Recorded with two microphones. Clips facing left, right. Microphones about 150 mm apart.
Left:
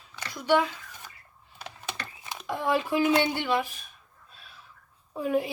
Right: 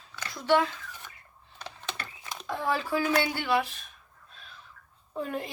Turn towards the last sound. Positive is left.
turn(degrees=10)  # may be behind; listen again after turning